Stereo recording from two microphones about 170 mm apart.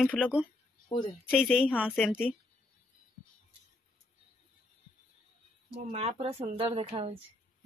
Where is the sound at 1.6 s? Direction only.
5° right (ahead or behind).